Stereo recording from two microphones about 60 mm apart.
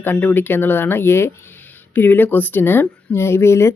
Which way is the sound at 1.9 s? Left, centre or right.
Left.